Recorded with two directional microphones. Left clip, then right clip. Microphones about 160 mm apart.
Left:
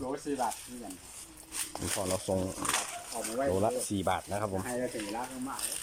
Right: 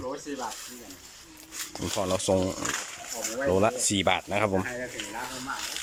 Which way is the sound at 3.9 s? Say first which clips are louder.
Right 6 dB; centre (ahead or behind).